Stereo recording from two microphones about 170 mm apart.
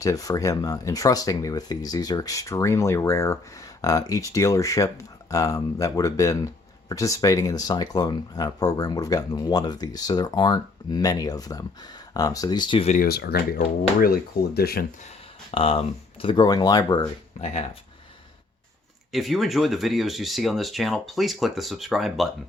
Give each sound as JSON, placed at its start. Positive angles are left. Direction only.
{"t": 0.0, "sound": "speech", "side_deg": 20}
{"t": 12.9, "sound": "speech", "side_deg": 60}
{"t": 15.5, "sound": "speech", "side_deg": 35}
{"t": 17.4, "sound": "speech", "side_deg": 35}
{"t": 19.1, "sound": "speech", "side_deg": 0}